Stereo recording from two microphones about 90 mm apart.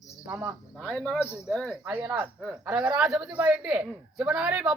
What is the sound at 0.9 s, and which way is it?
Speech, 5° left (ahead or behind).